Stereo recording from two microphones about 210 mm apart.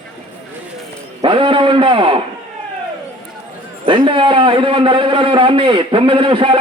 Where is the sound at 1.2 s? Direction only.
25° right (ahead or behind).